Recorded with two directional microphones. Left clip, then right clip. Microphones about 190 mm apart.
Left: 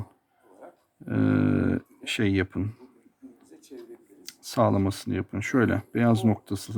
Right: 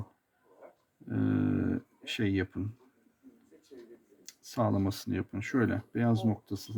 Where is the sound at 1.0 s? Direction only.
25° left (ahead or behind).